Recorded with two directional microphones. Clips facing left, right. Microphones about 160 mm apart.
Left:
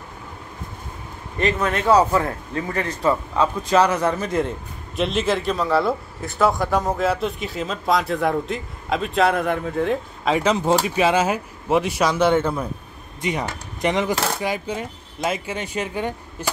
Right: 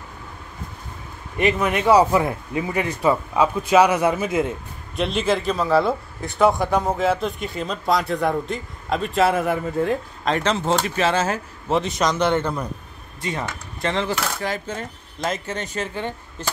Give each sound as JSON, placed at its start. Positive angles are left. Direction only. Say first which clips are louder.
{"t": 1.4, "sound": "speech", "louder": "right 1 dB", "side_deg": -15}
{"t": 13.2, "sound": "speech", "louder": "left 3 dB", "side_deg": 20}